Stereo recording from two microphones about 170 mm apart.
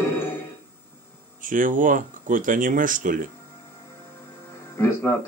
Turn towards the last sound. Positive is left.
turn(degrees=15)  # may be behind; listen again after turning